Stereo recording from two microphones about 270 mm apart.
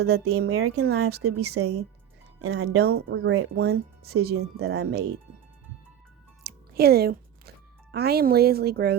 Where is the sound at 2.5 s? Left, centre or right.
Right.